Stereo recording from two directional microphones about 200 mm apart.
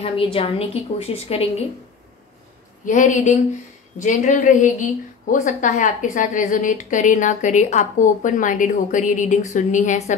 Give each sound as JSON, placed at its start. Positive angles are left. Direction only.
{"t": 0.0, "sound": "a woman's voice", "side_deg": 25}
{"t": 2.8, "sound": "a woman's voice", "side_deg": 40}